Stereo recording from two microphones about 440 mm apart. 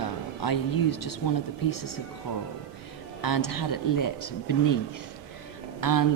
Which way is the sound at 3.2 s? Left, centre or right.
Left.